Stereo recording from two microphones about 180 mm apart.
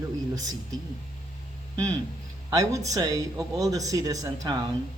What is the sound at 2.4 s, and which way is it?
Speech, 20° right (ahead or behind).